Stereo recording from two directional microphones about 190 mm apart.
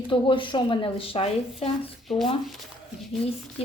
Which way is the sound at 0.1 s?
25° left (ahead or behind).